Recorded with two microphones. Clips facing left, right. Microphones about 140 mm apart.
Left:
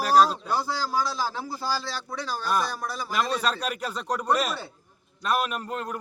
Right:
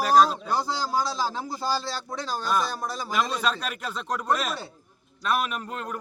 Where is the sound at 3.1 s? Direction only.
5° left (ahead or behind).